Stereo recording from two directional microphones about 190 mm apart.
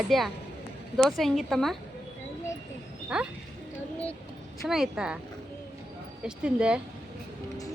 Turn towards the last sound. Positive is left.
turn(degrees=-5)  # may be behind; listen again after turning